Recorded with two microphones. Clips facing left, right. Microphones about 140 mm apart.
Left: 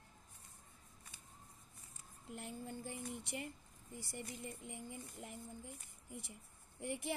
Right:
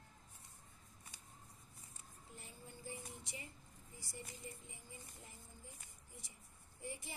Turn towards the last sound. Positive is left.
turn(degrees=65)  # may be behind; listen again after turning